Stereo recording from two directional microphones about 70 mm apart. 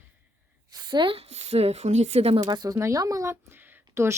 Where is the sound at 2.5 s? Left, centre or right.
Right.